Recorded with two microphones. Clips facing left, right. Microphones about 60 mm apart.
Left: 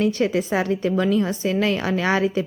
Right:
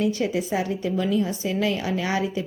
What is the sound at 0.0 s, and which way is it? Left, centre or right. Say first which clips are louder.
A woman's voice: left 3 dB; left.